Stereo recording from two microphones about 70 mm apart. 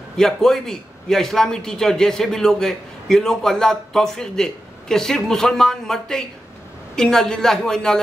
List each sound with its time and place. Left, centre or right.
0.2 s a man's voice: centre